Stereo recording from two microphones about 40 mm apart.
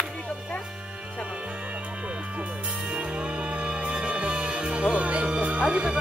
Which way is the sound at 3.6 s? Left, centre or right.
Right.